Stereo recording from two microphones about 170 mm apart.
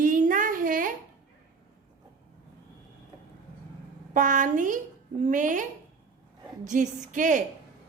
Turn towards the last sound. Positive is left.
turn(degrees=-50)  # may be behind; listen again after turning